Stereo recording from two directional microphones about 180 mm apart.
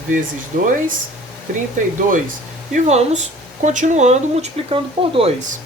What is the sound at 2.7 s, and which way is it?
Speech, 40° right (ahead or behind).